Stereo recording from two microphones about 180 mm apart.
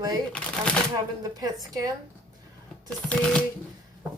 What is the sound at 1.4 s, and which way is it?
Speech, 20° right (ahead or behind).